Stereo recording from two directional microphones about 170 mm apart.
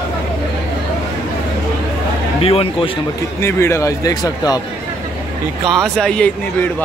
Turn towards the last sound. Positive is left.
turn(degrees=5)  # may be behind; listen again after turning